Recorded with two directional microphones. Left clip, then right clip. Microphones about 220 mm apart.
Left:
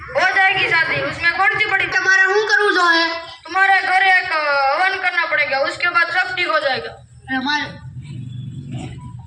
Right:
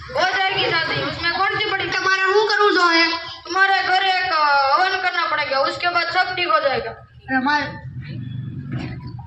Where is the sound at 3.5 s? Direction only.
40° right (ahead or behind).